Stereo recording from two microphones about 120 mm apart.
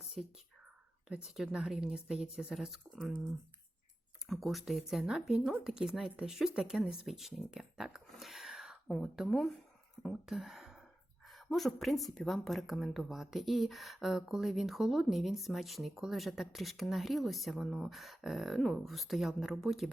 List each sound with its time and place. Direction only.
0.0 s whispering: centre (ahead or behind)
1.0 s a woman's voice: 5° right (ahead or behind)
4.3 s a woman's voice: centre (ahead or behind)